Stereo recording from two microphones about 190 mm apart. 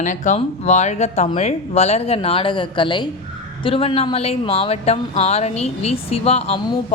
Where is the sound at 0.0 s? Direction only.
40° left (ahead or behind).